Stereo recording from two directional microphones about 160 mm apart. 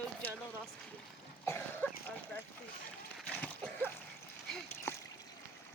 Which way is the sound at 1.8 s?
10° left (ahead or behind).